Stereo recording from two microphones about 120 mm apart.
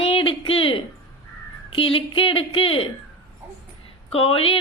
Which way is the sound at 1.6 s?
50° left (ahead or behind).